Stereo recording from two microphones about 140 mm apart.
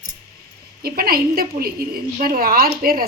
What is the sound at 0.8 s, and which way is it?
A woman's voice, 90° right.